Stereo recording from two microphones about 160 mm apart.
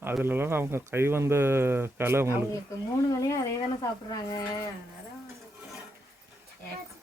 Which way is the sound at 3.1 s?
20° left (ahead or behind).